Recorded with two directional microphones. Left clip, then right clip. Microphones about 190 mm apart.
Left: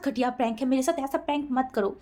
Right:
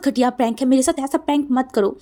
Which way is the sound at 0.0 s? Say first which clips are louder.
Right 8 dB; 45° right (ahead or behind).